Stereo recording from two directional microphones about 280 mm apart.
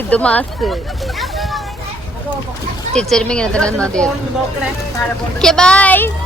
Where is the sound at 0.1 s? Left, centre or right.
Centre.